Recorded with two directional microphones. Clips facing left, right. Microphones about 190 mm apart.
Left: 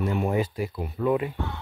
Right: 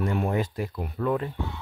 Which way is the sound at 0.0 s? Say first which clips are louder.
Left 1 dB; 5° left (ahead or behind).